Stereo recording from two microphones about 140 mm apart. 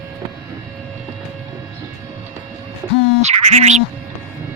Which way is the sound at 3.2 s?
55° right (ahead or behind).